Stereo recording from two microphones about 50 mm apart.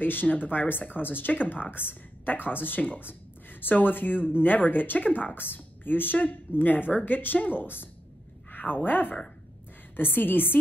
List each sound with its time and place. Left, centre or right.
0.0 s speech: left